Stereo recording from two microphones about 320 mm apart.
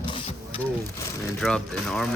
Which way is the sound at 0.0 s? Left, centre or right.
Centre.